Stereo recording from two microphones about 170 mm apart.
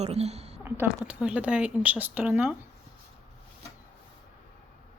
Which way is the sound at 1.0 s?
5° right (ahead or behind).